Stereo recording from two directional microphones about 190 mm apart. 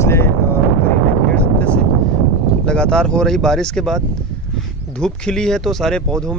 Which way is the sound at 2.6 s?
5° left (ahead or behind).